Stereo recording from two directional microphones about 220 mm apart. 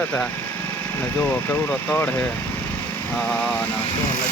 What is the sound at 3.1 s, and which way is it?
Vehicle, 5° left (ahead or behind).